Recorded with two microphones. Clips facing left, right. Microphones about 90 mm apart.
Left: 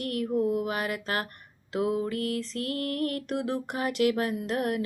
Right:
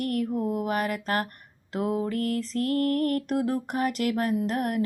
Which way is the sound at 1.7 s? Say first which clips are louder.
Right 1 dB; 35° right (ahead or behind).